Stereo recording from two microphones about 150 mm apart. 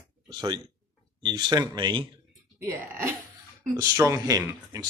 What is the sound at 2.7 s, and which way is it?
Speech, 20° right (ahead or behind).